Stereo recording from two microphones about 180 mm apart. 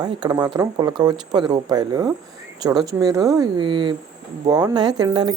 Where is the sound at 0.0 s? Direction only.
20° right (ahead or behind).